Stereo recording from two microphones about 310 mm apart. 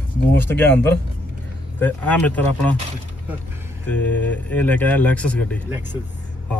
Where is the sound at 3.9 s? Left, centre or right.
Centre.